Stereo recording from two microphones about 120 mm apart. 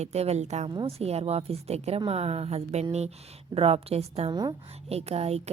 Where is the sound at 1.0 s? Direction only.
60° right (ahead or behind).